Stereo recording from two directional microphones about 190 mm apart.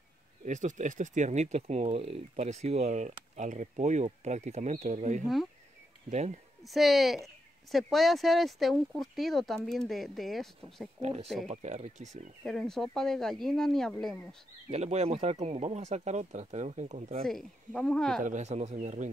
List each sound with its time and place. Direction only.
0.5 s speech: 40° right (ahead or behind)
6.6 s speech: centre (ahead or behind)
11.0 s speech: 35° right (ahead or behind)
12.4 s speech: centre (ahead or behind)
14.7 s speech: 35° right (ahead or behind)
17.2 s speech: centre (ahead or behind)
18.2 s speech: 40° right (ahead or behind)